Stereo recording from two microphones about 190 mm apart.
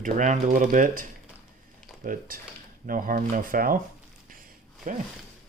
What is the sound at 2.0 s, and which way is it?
Speech, 45° right (ahead or behind).